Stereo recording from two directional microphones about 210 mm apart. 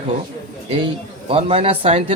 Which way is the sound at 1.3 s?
25° right (ahead or behind).